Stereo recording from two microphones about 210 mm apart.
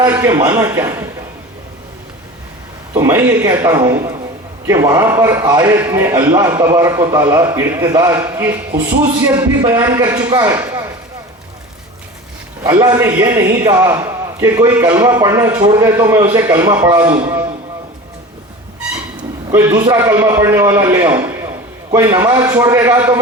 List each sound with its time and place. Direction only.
0.0 s a man's voice: 15° right (ahead or behind)
2.9 s a man's voice: 10° right (ahead or behind)
12.6 s a man's voice: 10° right (ahead or behind)
19.5 s a man's voice: 15° right (ahead or behind)